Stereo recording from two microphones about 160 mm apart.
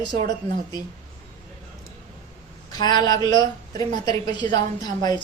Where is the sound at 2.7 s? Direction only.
25° left (ahead or behind).